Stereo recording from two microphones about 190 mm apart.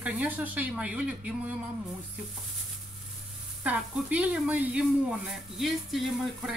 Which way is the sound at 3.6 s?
5° right (ahead or behind).